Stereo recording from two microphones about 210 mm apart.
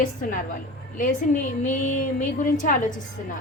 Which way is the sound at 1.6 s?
35° left (ahead or behind).